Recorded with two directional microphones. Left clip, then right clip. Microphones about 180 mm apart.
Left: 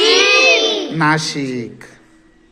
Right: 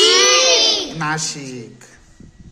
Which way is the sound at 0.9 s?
20° left (ahead or behind).